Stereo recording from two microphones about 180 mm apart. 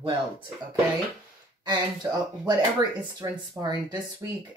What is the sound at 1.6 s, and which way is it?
Speech, 25° right (ahead or behind).